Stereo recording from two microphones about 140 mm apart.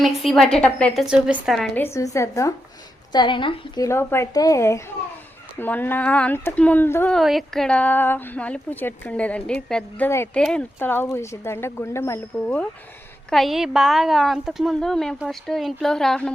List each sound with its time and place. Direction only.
0.0 s speech: centre (ahead or behind)
1.0 s speech: 5° right (ahead or behind)
1.7 s speech: 20° left (ahead or behind)
3.1 s a woman's voice: 35° left (ahead or behind)
3.8 s speech: 20° left (ahead or behind)
7.1 s speech: centre (ahead or behind); by 12.2 s 20° left (ahead or behind)
13.3 s speech: centre (ahead or behind)